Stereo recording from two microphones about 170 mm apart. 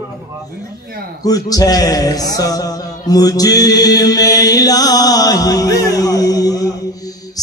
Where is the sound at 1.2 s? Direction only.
20° left (ahead or behind).